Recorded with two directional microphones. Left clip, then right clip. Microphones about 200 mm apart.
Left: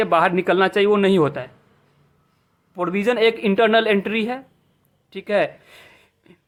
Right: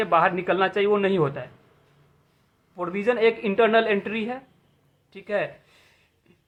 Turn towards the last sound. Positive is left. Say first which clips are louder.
# left 10 dB
turn(degrees=55)  # may be behind; listen again after turning